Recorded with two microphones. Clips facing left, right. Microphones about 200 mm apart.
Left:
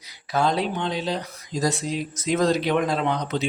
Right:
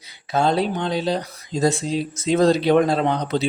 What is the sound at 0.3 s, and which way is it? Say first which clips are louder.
Speech: right 3 dB; 25° right (ahead or behind).